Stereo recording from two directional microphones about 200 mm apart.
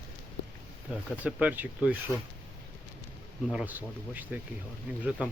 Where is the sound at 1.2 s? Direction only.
5° right (ahead or behind).